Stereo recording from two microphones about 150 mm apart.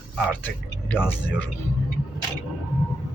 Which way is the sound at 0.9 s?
15° left (ahead or behind).